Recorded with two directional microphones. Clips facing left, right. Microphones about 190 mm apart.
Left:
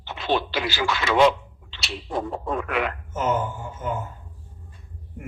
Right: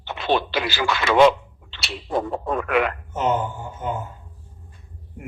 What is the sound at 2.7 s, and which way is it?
Speech, 60° right (ahead or behind).